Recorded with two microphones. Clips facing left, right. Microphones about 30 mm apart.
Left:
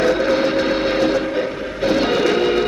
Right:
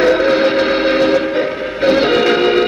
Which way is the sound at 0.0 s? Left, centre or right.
Right.